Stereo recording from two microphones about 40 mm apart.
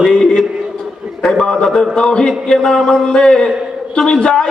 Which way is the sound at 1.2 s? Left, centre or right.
Centre.